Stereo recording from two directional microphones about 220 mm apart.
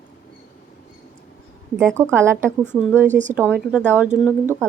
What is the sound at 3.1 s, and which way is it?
Speech, 35° right (ahead or behind).